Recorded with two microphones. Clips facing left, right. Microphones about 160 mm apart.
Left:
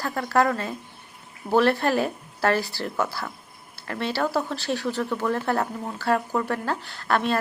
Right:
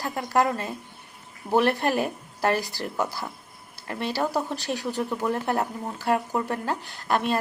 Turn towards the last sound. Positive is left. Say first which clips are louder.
# left 1 dB
turn(degrees=-10)  # may be behind; listen again after turning